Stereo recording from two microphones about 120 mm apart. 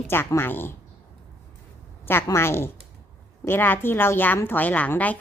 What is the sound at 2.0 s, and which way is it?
A woman's voice, 20° left (ahead or behind).